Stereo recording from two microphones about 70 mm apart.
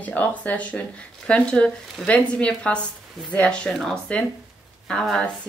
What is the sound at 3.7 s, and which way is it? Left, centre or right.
Speech, centre.